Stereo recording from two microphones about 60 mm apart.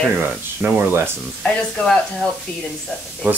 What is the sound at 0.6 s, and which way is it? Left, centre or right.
Speech, right.